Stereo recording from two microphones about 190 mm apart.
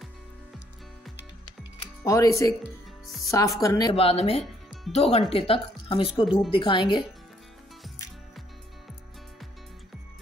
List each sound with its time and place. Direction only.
2.0 s speech: 15° left (ahead or behind)
3.9 s speech: 30° left (ahead or behind)